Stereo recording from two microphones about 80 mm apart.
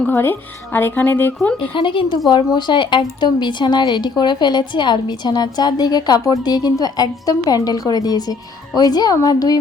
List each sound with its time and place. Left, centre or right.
0.1 s speech: left
1.7 s a woman's voice: left
2.3 s speech: left